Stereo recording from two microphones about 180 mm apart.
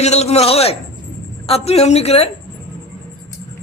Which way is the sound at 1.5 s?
35° left (ahead or behind).